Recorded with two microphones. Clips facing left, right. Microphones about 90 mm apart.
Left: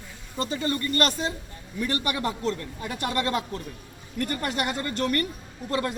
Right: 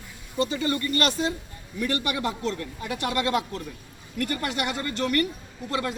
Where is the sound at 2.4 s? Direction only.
35° left (ahead or behind).